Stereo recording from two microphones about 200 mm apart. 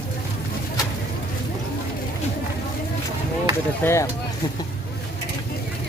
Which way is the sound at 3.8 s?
15° left (ahead or behind).